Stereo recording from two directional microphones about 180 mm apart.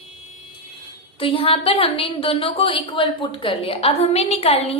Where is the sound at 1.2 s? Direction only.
30° left (ahead or behind).